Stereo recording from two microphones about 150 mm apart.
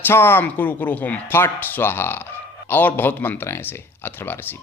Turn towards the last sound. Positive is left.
turn(degrees=15)  # may be behind; listen again after turning